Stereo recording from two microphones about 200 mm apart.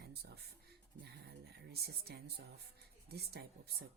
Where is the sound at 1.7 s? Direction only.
50° right (ahead or behind).